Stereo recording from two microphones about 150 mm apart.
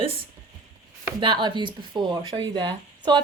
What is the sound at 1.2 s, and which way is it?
Speech, 30° right (ahead or behind).